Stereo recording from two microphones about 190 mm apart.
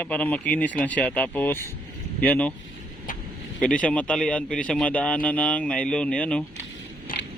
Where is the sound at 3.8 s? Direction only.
5° left (ahead or behind).